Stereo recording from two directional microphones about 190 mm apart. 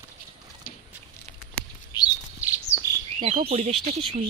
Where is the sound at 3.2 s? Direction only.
30° right (ahead or behind).